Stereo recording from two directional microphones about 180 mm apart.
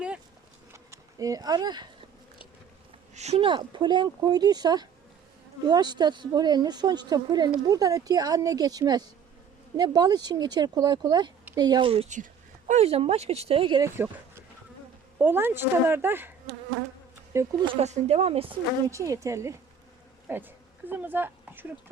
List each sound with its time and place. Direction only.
0.7 s a sound: 15° right (ahead or behind)
3.2 s speech: 35° right (ahead or behind)
13.8 s speech: 15° right (ahead or behind)
17.3 s speech: 15° right (ahead or behind)
17.7 s speech: 40° right (ahead or behind)
18.9 s speech: 20° right (ahead or behind)
20.2 s a sound: 10° right (ahead or behind)